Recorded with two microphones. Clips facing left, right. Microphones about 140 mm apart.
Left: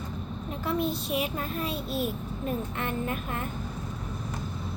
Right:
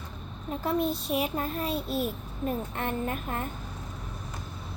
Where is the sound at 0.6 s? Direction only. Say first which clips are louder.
Right 1 dB; 45° right (ahead or behind).